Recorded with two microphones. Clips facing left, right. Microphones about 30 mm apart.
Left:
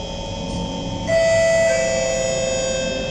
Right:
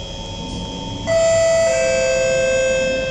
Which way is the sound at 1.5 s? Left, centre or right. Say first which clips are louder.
Right 1 dB; right.